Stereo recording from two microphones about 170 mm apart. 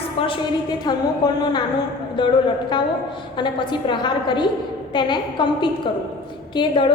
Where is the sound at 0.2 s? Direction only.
25° left (ahead or behind).